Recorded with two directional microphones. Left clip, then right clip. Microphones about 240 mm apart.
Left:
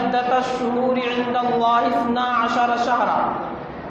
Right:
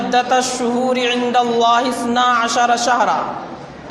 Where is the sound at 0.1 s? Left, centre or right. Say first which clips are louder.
Right 8 dB; right.